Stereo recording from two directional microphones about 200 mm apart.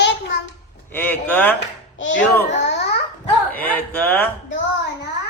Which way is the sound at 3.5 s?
10° left (ahead or behind).